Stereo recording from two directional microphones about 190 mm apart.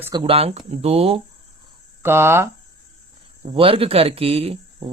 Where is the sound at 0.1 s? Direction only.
25° right (ahead or behind).